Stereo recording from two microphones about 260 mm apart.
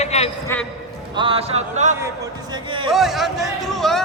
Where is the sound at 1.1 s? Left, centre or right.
Centre.